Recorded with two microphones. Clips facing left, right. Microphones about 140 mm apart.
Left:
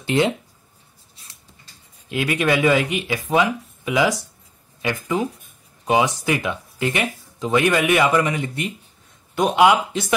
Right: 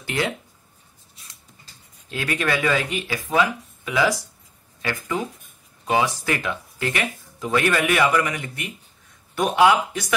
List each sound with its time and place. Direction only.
0.0 s speech: 25° left (ahead or behind)
2.0 s speech: 15° left (ahead or behind)